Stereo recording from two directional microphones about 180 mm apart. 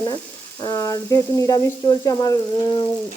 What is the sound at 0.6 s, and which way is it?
Frying, 20° left (ahead or behind).